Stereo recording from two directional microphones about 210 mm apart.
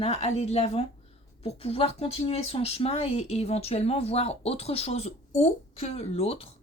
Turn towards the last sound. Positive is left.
turn(degrees=30)  # may be behind; listen again after turning